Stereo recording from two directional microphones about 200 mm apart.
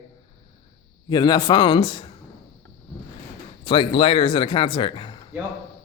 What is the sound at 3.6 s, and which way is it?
Speech, 25° left (ahead or behind).